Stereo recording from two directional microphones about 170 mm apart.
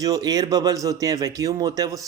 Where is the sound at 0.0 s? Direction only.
20° right (ahead or behind).